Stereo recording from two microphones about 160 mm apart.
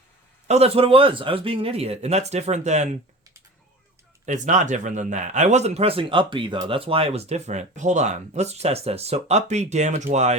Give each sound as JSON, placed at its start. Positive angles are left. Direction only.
{"t": 0.4, "sound": "a man's voice", "side_deg": -40}
{"t": 4.3, "sound": "speech", "side_deg": -50}